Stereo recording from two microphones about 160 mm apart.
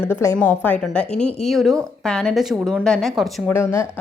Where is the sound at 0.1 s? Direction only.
15° left (ahead or behind); by 3.5 s centre (ahead or behind).